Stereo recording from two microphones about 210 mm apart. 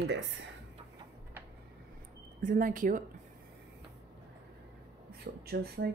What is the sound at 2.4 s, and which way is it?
Speech, 40° right (ahead or behind).